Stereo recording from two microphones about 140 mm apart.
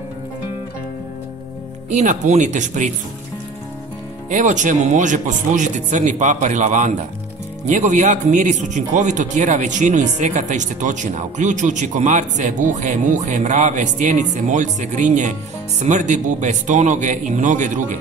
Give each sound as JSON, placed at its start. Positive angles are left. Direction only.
{"t": 1.9, "sound": "a man's voice", "side_deg": -55}
{"t": 4.3, "sound": "a man's voice", "side_deg": -60}